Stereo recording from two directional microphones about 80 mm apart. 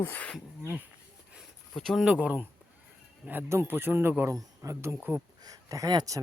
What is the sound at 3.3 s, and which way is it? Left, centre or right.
Speech, right.